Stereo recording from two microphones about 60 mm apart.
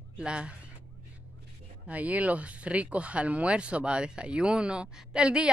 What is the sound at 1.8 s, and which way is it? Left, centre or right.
Speech, right.